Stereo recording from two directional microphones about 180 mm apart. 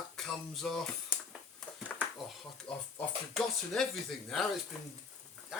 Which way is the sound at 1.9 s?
10° left (ahead or behind).